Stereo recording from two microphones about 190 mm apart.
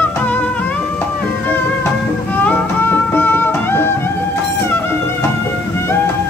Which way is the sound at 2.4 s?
10° left (ahead or behind).